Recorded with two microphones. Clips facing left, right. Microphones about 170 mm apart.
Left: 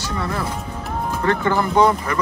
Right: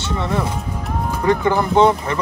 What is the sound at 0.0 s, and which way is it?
Music, 20° right (ahead or behind).